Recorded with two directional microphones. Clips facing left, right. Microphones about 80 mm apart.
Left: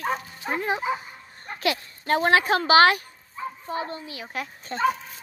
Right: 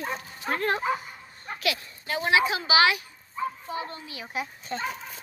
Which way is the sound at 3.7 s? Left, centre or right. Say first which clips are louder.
Left 3 dB; left.